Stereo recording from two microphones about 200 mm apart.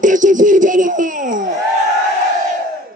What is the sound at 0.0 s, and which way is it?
Music, 40° right (ahead or behind).